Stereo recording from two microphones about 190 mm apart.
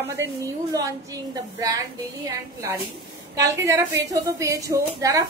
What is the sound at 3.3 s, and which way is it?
A woman's voice, 15° right (ahead or behind).